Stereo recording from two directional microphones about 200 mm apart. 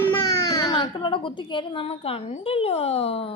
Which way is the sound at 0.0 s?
15° left (ahead or behind).